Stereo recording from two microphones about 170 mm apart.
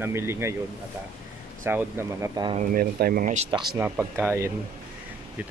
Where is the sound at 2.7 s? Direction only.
60° right (ahead or behind).